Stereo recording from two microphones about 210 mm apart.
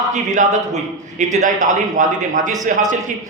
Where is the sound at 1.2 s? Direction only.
35° right (ahead or behind).